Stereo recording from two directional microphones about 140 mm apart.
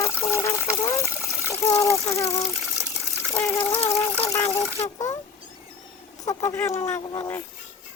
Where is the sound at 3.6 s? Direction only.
45° left (ahead or behind).